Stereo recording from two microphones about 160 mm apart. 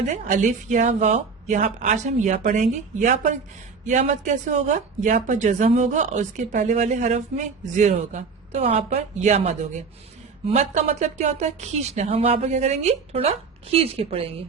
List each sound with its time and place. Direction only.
0.1 s speech: 50° right (ahead or behind)